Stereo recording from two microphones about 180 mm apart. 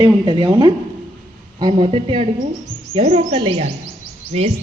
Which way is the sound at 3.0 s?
40° right (ahead or behind).